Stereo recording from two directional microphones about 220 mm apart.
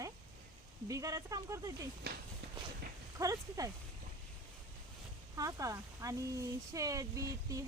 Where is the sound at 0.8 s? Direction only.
15° right (ahead or behind).